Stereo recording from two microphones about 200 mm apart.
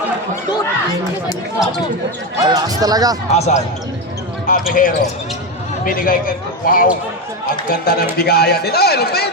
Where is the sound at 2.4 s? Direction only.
20° right (ahead or behind).